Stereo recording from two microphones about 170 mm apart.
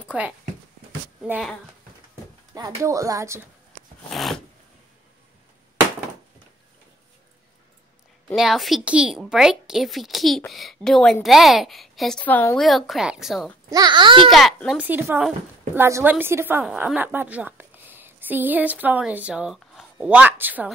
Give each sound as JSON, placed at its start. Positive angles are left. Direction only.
{"t": 1.2, "sound": "speech", "side_deg": -5}
{"t": 2.5, "sound": "speech", "side_deg": -20}
{"t": 4.1, "sound": "zipper", "side_deg": 0}
{"t": 8.4, "sound": "speech", "side_deg": 0}
{"t": 13.7, "sound": "speech", "side_deg": -25}
{"t": 14.3, "sound": "speech", "side_deg": 0}
{"t": 14.9, "sound": "a woman's voice", "side_deg": -10}